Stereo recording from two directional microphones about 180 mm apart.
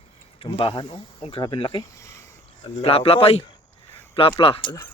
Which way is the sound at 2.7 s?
30° left (ahead or behind).